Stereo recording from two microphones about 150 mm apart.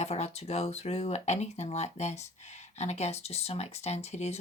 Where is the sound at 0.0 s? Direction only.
45° left (ahead or behind).